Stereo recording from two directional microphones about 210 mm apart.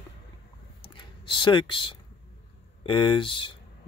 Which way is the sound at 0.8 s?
20° left (ahead or behind).